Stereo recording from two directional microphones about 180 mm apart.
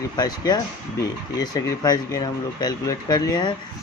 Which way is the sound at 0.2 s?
20° left (ahead or behind).